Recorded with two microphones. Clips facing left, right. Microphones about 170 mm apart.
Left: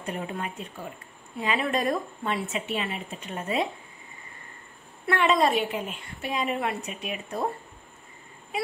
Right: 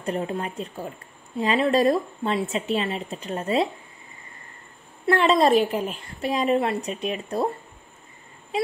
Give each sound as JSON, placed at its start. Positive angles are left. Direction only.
{"t": 0.0, "sound": "a woman's voice", "side_deg": -35}
{"t": 5.0, "sound": "a woman's voice", "side_deg": -30}